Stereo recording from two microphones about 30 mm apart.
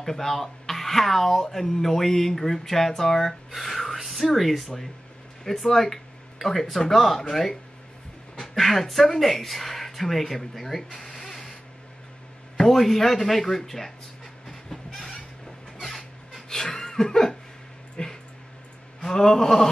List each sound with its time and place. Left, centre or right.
0.0 s speech: centre
3.5 s gasp: centre
4.3 s speech: centre
8.5 s speech: centre
12.5 s speech: centre
16.4 s laughter: centre
18.0 s dog: left
19.0 s speech: centre